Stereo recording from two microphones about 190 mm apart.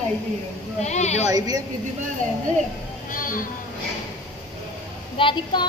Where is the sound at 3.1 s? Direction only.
45° left (ahead or behind).